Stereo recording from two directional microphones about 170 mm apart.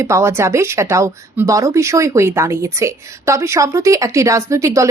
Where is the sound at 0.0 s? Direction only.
15° right (ahead or behind).